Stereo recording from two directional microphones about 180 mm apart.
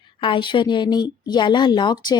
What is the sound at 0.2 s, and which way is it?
A woman's voice, 25° left (ahead or behind).